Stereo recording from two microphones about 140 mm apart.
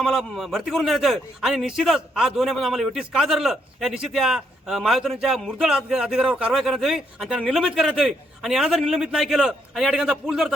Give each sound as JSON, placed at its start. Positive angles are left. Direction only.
{"t": 0.0, "sound": "a man's voice", "side_deg": 0}